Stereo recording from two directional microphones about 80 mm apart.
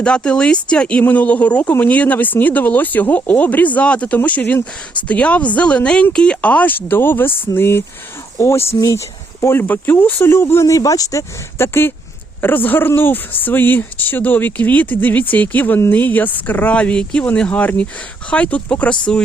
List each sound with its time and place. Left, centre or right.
0.0 s speech: centre